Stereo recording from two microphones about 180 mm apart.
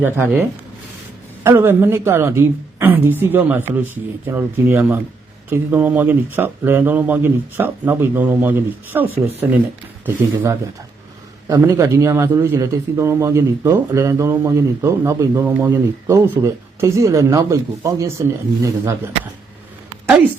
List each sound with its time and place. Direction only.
0.0 s a man's voice: 10° right (ahead or behind)
1.5 s a man's voice: 15° right (ahead or behind)
10.2 s a man's voice: 15° right (ahead or behind)